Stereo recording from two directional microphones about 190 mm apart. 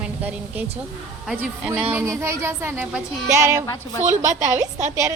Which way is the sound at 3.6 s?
15° left (ahead or behind).